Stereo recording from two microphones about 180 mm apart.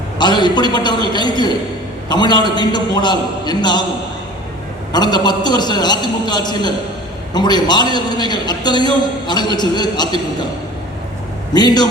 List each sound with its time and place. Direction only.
0.2 s a man's voice: 25° left (ahead or behind)
4.9 s a man's voice: 25° left (ahead or behind)
11.5 s a man's voice: 25° left (ahead or behind)